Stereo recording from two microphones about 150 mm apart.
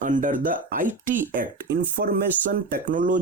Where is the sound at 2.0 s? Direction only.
90° right.